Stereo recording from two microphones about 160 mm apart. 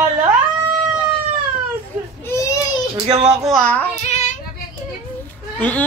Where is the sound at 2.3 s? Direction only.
20° left (ahead or behind).